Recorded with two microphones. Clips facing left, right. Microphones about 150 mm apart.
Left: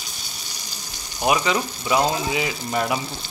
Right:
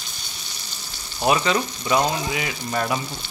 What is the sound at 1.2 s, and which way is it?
Speech, 15° left (ahead or behind).